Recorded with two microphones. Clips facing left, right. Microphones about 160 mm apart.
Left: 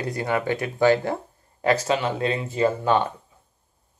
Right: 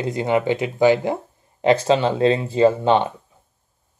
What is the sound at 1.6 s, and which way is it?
Speech, 25° right (ahead or behind).